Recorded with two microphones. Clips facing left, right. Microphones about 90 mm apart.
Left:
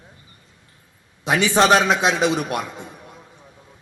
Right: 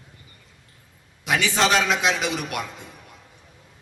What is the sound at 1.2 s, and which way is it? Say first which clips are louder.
A man's voice: left 5 dB; 25° left (ahead or behind).